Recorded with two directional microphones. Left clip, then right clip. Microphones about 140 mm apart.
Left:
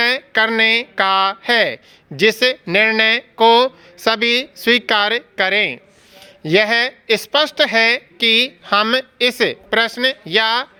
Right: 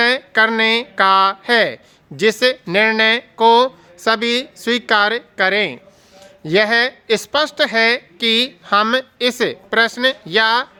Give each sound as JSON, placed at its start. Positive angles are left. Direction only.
{"t": 0.0, "sound": "speech", "side_deg": 15}